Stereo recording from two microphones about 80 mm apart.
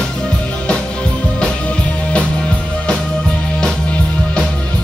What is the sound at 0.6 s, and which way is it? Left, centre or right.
Music, centre.